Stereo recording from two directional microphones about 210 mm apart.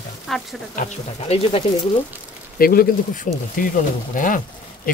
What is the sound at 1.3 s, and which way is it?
Speech, 30° left (ahead or behind).